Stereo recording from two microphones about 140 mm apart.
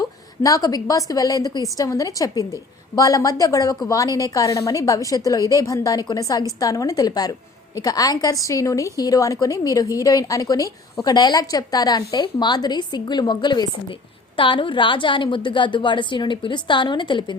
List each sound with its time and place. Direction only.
0.4 s a woman's voice: 25° left (ahead or behind)